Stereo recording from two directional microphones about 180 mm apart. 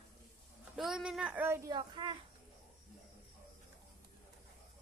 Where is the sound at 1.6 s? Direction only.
25° right (ahead or behind).